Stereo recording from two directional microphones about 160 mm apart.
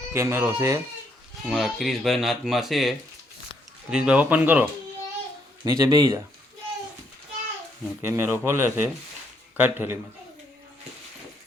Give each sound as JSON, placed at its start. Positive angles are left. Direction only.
{"t": 0.1, "sound": "speech", "side_deg": -15}
{"t": 1.5, "sound": "speech", "side_deg": 0}
{"t": 5.6, "sound": "speech", "side_deg": -20}
{"t": 8.0, "sound": "speech", "side_deg": -15}